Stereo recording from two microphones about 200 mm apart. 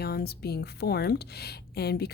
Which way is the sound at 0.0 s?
50° left (ahead or behind).